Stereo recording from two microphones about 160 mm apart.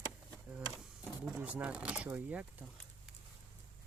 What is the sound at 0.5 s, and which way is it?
Speech, 10° right (ahead or behind).